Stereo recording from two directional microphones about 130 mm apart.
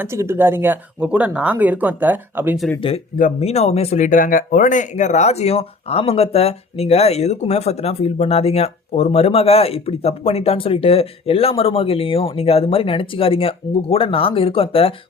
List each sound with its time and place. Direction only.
0.0 s speech: 20° right (ahead or behind)
3.4 s speech: 55° left (ahead or behind)